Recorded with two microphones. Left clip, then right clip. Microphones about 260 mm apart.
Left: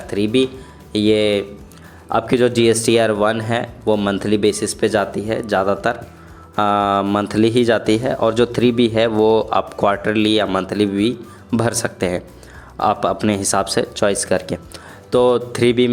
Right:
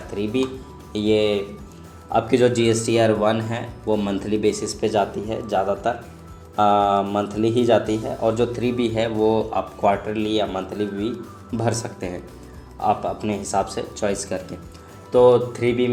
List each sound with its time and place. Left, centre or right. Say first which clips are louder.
0.1 s speech: left 7 dB; left